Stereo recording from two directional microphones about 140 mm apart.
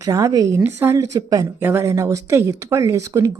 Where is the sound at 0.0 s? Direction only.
25° right (ahead or behind).